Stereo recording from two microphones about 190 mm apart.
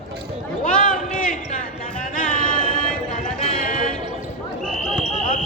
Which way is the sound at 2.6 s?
5° left (ahead or behind).